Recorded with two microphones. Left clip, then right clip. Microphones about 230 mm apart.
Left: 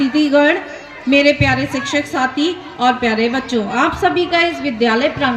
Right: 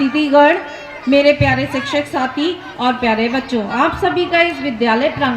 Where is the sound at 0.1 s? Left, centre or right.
Left.